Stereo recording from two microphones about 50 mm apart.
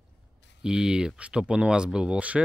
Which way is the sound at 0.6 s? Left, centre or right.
Centre.